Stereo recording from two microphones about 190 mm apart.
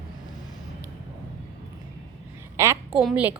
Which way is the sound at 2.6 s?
15° right (ahead or behind).